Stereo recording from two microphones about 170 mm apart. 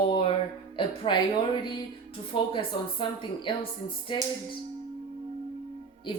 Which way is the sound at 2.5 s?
30° left (ahead or behind).